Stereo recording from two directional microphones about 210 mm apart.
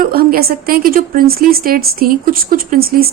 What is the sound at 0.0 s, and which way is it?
Speech, 45° right (ahead or behind).